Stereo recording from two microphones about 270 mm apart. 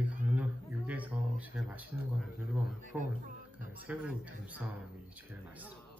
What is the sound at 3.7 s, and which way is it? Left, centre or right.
A man's voice, centre.